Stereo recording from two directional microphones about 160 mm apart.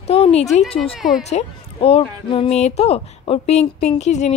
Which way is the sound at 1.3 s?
35° left (ahead or behind).